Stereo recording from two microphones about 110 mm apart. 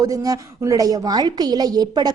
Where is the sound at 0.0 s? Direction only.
30° right (ahead or behind).